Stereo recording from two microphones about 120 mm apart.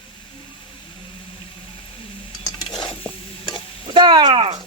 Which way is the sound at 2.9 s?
45° left (ahead or behind).